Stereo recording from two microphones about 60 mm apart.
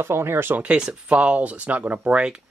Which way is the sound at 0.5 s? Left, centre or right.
Centre.